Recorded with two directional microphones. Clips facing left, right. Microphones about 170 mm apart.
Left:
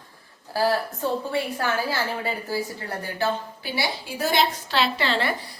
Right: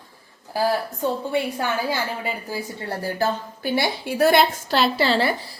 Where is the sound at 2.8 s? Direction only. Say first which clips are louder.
Right 3 dB; 35° right (ahead or behind); by 4.4 s 60° right (ahead or behind).